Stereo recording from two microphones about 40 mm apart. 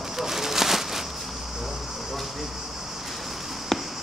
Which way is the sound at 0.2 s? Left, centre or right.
Centre.